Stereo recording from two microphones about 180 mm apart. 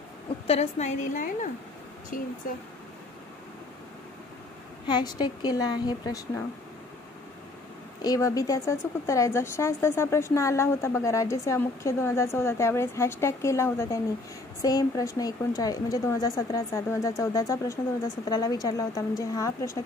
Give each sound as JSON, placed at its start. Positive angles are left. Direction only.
{"t": 0.5, "sound": "a woman's voice", "side_deg": 40}
{"t": 4.8, "sound": "a woman's voice", "side_deg": 25}
{"t": 8.0, "sound": "a woman's voice", "side_deg": 20}